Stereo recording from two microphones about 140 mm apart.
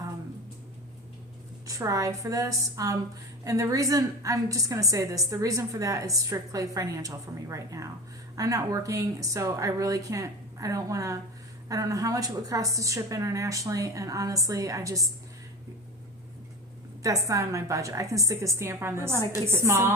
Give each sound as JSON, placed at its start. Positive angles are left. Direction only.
{"t": 1.6, "sound": "a woman's voice", "side_deg": -25}
{"t": 17.0, "sound": "a woman's voice", "side_deg": -25}